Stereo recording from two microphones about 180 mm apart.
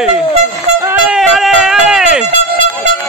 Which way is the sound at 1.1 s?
Centre (ahead or behind).